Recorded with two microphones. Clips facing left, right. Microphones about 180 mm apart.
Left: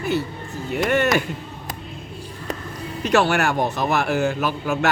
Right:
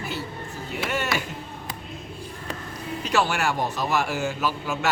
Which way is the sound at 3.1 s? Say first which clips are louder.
Left 5 dB; 65° left (ahead or behind).